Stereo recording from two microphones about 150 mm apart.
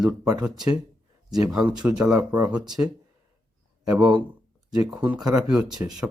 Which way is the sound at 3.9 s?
5° right (ahead or behind).